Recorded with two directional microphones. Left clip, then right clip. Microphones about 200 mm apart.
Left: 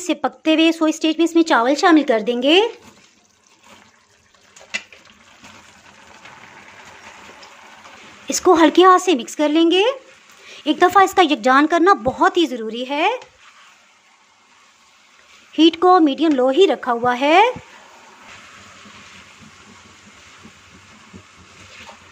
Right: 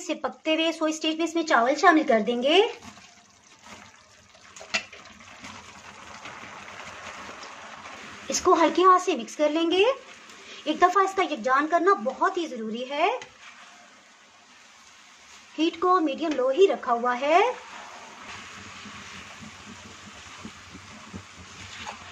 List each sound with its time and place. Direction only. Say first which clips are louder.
0.0 s speech: left 9 dB; 35° left (ahead or behind)
8.3 s speech: left 7 dB; 35° left (ahead or behind)
15.5 s speech: left 10 dB; 35° left (ahead or behind)